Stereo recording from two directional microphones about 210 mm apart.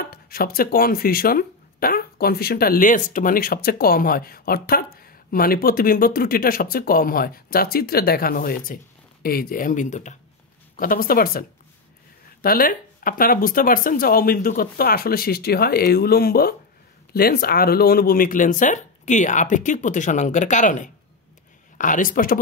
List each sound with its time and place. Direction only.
0.0 s speech: 45° left (ahead or behind)